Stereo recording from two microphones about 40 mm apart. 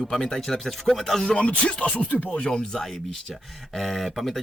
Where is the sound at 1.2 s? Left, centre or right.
Left.